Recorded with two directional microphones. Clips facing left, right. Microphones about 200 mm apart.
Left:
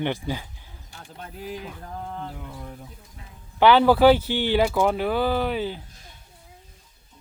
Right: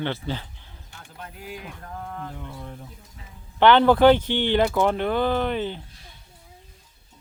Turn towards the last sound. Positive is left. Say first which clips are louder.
# even
turn(degrees=5)  # may be behind; listen again after turning